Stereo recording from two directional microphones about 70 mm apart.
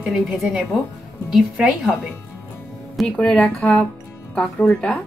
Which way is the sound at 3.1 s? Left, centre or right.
Centre.